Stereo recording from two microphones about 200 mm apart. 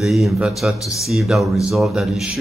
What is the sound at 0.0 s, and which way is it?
Speech, centre (ahead or behind).